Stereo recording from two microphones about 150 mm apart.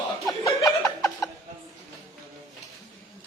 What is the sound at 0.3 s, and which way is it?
Chuckle, 20° left (ahead or behind).